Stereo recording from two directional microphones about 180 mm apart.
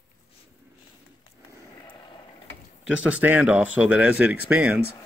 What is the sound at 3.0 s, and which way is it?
Speech, 10° right (ahead or behind).